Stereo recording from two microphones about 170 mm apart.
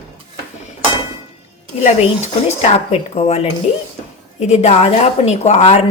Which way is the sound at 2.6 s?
35° left (ahead or behind).